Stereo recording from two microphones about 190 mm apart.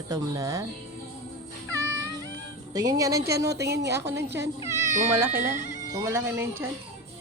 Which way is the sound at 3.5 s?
60° right (ahead or behind).